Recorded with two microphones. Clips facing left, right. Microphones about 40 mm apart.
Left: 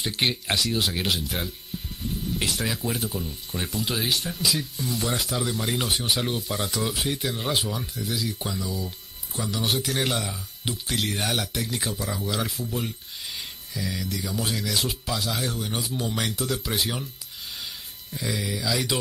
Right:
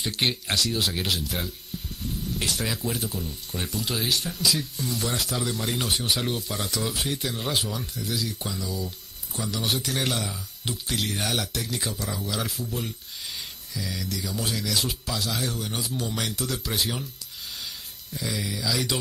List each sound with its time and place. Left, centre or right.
0.0 s speech: centre
1.7 s a sound: centre
2.5 s a man's voice: centre
18.1 s speech: centre